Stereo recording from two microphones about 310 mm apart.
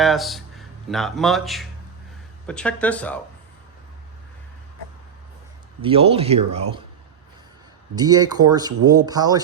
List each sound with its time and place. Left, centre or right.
0.0 s speech: centre
5.8 s speech: centre
7.9 s speech: centre